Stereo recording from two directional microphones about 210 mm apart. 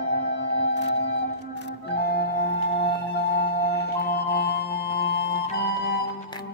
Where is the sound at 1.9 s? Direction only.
55° left (ahead or behind).